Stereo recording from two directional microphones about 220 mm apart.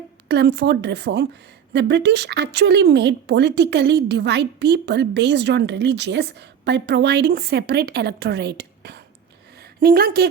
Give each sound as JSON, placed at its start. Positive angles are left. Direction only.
{"t": 0.3, "sound": "speech", "side_deg": -50}